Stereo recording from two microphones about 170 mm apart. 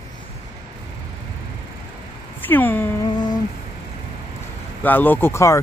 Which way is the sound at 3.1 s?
25° left (ahead or behind).